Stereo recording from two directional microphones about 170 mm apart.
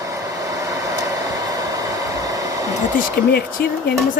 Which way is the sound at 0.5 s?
20° right (ahead or behind).